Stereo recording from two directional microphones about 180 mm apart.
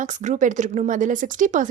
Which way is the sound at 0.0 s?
40° right (ahead or behind).